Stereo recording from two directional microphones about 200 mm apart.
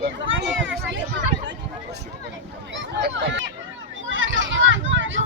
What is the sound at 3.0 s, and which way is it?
Speech, 55° right (ahead or behind).